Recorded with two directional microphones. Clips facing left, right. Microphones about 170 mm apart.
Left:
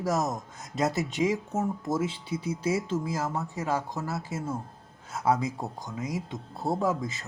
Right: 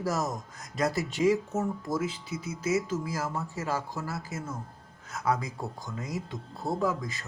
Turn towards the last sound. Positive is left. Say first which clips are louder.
# left 2 dB
turn(degrees=25)  # may be behind; listen again after turning